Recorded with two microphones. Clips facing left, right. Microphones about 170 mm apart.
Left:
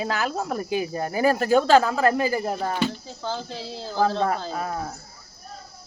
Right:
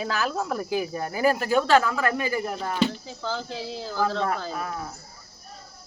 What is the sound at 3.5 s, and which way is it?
Speech, 15° right (ahead or behind).